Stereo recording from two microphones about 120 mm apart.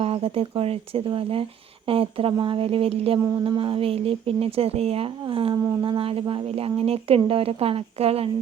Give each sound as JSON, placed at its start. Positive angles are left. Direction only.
{"t": 0.0, "sound": "speech", "side_deg": -55}